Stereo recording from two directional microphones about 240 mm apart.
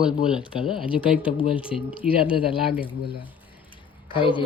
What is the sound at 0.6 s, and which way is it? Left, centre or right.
Speech, left.